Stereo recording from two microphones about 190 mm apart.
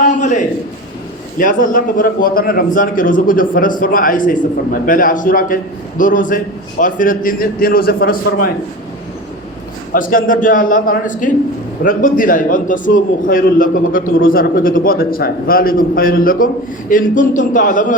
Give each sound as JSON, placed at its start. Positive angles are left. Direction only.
{"t": 0.0, "sound": "a sound", "side_deg": 40}
{"t": 1.4, "sound": "a man's voice", "side_deg": 45}
{"t": 9.9, "sound": "a man's voice", "side_deg": 45}